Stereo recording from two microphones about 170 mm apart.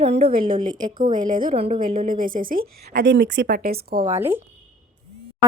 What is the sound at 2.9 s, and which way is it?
Speech, 90° right.